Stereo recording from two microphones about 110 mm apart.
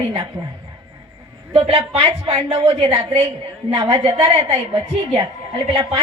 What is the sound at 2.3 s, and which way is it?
Speech, 65° right (ahead or behind).